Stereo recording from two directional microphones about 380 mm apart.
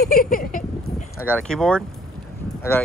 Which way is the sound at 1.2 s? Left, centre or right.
Centre.